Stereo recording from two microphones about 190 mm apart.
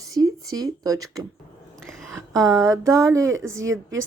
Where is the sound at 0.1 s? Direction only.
20° right (ahead or behind).